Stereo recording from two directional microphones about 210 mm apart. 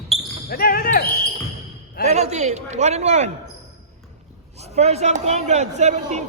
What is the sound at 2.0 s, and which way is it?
Speech, 30° right (ahead or behind).